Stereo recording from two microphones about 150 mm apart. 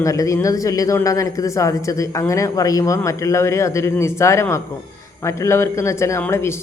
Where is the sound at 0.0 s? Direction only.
20° left (ahead or behind).